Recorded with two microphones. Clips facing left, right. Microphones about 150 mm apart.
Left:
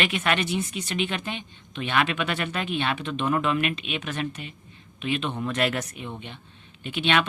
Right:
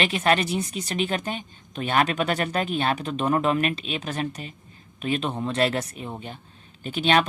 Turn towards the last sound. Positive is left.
turn(degrees=-40)  # may be behind; listen again after turning